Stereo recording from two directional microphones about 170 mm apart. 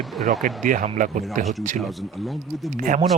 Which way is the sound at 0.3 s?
50° right (ahead or behind).